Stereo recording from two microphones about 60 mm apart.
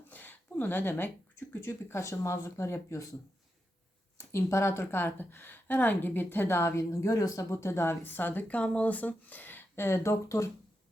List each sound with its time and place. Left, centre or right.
0.1 s a sound: left
1.6 s a woman's voice: left
4.3 s a woman's voice: left
7.6 s speech: left
9.8 s a woman's voice: left